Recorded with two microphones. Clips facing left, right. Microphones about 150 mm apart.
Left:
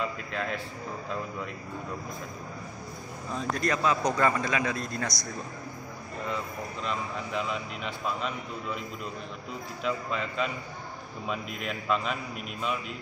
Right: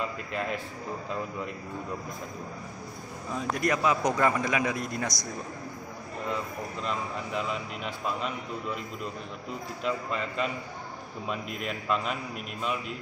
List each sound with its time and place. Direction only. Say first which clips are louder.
0.3 s a man's voice: right 1 dB; 5° right (ahead or behind)
3.3 s a man's voice: right 1 dB; 15° right (ahead or behind)
7.3 s a man's voice: even; centre (ahead or behind)
9.8 s a man's voice: even; centre (ahead or behind)